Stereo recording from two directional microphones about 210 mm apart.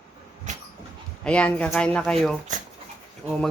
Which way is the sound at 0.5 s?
35° right (ahead or behind).